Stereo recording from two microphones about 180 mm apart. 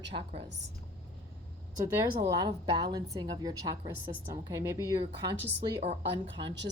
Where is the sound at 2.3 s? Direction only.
25° right (ahead or behind).